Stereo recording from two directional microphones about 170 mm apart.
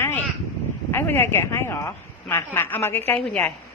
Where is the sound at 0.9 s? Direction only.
15° left (ahead or behind).